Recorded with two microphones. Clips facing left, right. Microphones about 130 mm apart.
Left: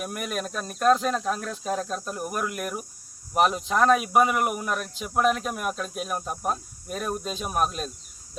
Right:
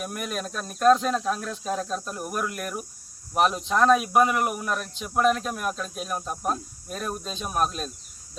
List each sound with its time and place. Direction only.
0.0 s speech: centre (ahead or behind)